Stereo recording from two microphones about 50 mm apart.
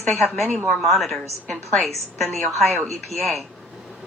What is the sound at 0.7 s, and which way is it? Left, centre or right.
A woman's voice, centre.